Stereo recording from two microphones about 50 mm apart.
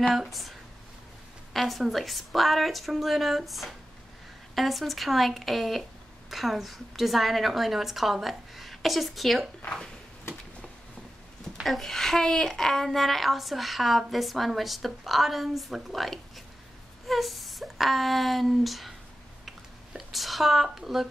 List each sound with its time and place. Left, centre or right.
0.1 s speech: centre
11.6 s speech: centre
19.4 s a sound: centre